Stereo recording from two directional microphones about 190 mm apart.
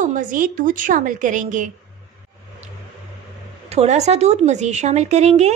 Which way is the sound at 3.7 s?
35° right (ahead or behind).